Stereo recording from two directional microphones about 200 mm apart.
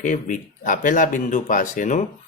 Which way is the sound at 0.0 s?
40° left (ahead or behind).